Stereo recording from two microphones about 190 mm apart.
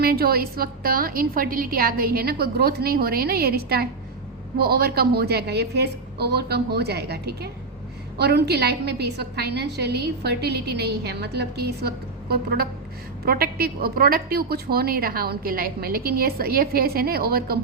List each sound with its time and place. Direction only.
0.0 s a woman's voice: 55° right (ahead or behind)